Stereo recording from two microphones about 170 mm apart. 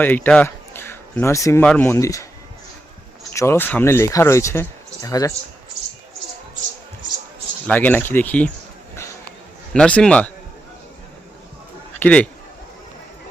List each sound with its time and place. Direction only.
0.0 s speech: 10° left (ahead or behind)
3.3 s speech: 15° left (ahead or behind)
7.7 s speech: 10° left (ahead or behind)
9.7 s speech: 5° left (ahead or behind)
11.9 s a man's voice: 10° left (ahead or behind)